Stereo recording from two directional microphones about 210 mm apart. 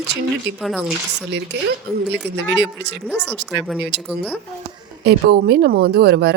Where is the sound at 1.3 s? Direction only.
55° right (ahead or behind).